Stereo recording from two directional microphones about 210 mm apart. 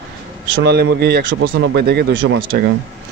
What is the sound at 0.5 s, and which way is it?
Speech, 55° right (ahead or behind).